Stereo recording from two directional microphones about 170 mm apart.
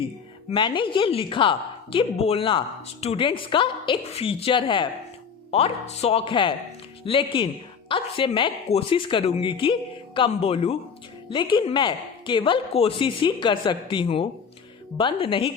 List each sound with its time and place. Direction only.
0.5 s a woman's voice: 30° left (ahead or behind)